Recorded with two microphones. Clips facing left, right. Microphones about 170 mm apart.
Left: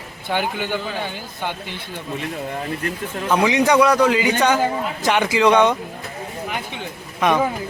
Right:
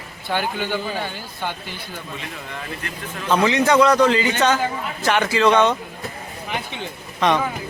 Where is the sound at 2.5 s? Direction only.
40° left (ahead or behind).